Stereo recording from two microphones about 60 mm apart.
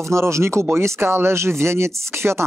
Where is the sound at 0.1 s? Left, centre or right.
Right.